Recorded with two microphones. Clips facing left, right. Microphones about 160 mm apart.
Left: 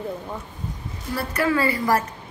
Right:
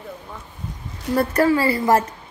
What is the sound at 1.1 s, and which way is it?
Speech, 40° right (ahead or behind).